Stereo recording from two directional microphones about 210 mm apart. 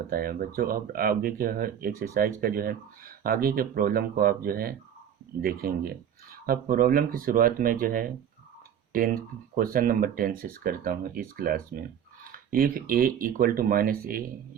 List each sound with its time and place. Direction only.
0.1 s speech: 45° right (ahead or behind)